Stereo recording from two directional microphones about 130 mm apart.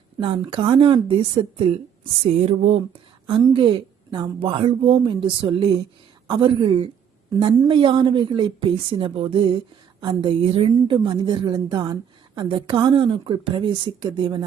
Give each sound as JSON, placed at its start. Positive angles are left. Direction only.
{"t": 0.2, "sound": "speech", "side_deg": -45}
{"t": 2.2, "sound": "music", "side_deg": -55}
{"t": 3.2, "sound": "a woman's voice", "side_deg": -40}